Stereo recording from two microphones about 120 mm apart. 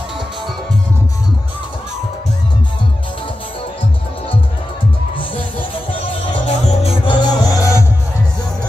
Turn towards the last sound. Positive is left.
turn(degrees=30)  # may be behind; listen again after turning